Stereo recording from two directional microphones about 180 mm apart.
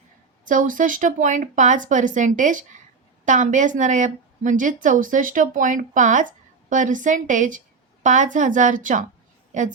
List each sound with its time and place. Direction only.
0.4 s a woman's voice: 45° right (ahead or behind)